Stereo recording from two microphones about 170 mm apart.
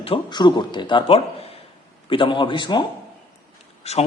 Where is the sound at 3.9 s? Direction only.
40° left (ahead or behind).